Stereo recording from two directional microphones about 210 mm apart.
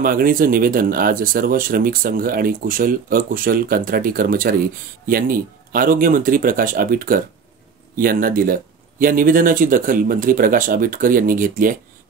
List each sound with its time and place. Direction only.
0.0 s speech: 45° right (ahead or behind)